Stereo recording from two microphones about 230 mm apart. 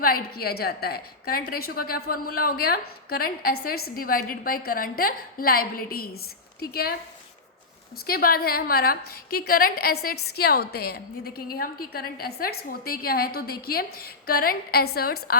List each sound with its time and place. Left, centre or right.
0.0 s a woman's voice: left
8.0 s a woman's voice: left